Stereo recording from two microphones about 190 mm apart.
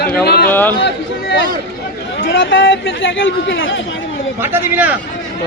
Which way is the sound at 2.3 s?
80° left.